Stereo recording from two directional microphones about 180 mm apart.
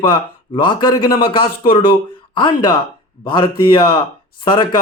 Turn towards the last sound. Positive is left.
turn(degrees=25)  # may be behind; listen again after turning